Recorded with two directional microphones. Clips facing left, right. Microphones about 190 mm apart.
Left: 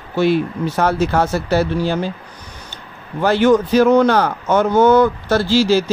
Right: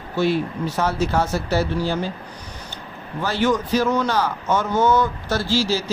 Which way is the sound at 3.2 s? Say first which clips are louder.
Left 8 dB; 55° left (ahead or behind).